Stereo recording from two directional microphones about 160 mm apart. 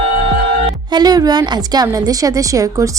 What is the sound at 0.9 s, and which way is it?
A woman's voice, 25° right (ahead or behind).